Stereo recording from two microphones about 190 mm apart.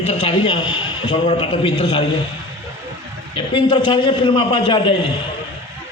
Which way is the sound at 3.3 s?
25° left (ahead or behind).